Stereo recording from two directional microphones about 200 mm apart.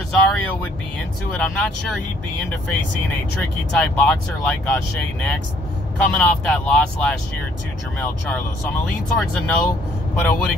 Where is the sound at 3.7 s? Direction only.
5° left (ahead or behind).